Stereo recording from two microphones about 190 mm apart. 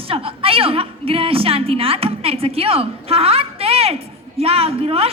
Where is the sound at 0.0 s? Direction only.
30° right (ahead or behind).